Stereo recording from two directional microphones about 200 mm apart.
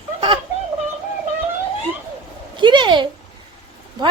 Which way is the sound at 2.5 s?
25° right (ahead or behind).